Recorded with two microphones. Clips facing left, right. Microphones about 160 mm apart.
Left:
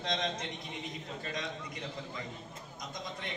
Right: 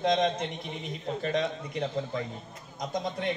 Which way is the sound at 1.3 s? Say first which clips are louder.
Right 10 dB; 65° right (ahead or behind).